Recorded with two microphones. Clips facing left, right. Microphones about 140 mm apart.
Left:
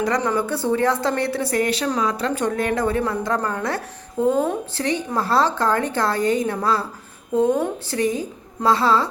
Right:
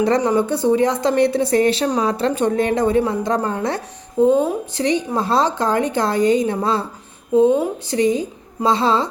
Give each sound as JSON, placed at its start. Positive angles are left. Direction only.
{"t": 0.2, "sound": "a woman's voice", "side_deg": -20}
{"t": 7.3, "sound": "a woman's voice", "side_deg": -10}